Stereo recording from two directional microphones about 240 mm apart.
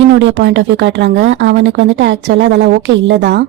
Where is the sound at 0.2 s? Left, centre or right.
Right.